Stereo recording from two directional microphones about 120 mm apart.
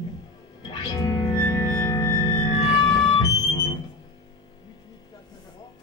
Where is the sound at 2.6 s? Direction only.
45° left (ahead or behind).